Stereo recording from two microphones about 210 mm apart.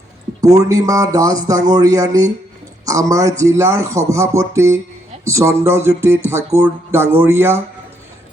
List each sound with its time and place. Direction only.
0.4 s speech: 15° right (ahead or behind)